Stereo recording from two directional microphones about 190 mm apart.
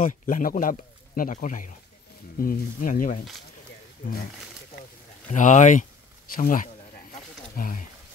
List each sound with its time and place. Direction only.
0.0 s speech: 45° left (ahead or behind)
5.3 s speech: 40° left (ahead or behind)